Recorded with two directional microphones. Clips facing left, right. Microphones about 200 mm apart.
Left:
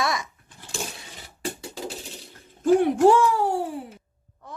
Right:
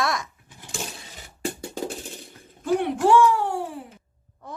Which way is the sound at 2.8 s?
40° left (ahead or behind).